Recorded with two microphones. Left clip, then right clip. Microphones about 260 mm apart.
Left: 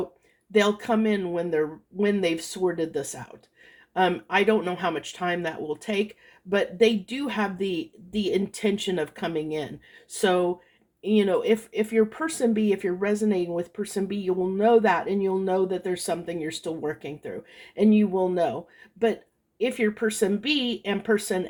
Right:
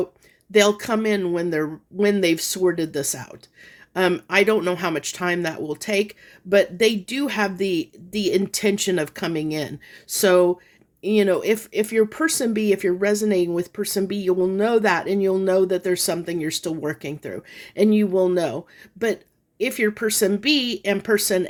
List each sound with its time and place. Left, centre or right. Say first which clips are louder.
0.5 s speech: right 4 dB; right
19.5 s speech: right 3 dB; right